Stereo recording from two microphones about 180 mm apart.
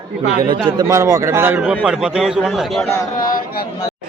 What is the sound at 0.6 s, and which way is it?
A man's voice, 20° right (ahead or behind).